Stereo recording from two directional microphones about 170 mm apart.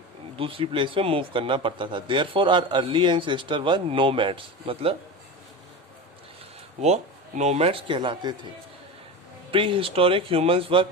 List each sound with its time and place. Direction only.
0.3 s speech: 30° right (ahead or behind)
6.8 s speech: 40° right (ahead or behind)
9.5 s speech: 30° right (ahead or behind)